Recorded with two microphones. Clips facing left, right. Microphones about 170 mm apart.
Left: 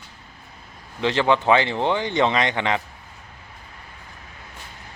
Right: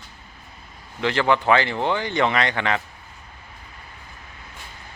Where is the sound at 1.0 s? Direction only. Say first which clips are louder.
Left 1 dB; 20° left (ahead or behind).